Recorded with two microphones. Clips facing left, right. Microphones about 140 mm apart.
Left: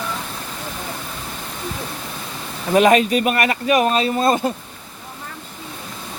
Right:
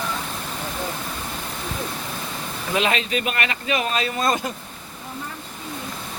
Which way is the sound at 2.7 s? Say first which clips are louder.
Left 9 dB; 45° left (ahead or behind).